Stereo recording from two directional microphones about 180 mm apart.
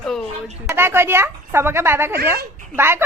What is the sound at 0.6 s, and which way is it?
Speech, 15° right (ahead or behind).